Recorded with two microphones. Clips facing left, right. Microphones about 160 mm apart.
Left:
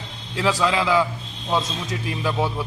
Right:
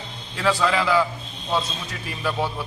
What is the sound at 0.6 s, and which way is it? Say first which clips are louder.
A man's voice: left 1 dB; 15° left (ahead or behind).